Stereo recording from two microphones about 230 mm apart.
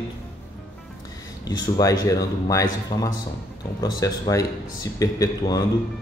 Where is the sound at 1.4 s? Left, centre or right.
Centre.